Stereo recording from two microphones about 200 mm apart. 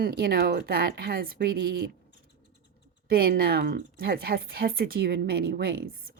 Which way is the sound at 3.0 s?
50° right (ahead or behind).